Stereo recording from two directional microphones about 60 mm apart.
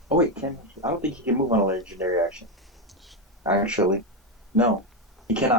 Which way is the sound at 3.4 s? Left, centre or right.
Right.